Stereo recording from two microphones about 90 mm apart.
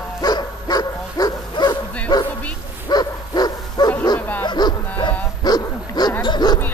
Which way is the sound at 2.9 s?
50° left (ahead or behind).